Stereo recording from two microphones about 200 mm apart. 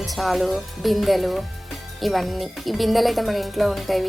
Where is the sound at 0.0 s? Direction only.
Centre (ahead or behind).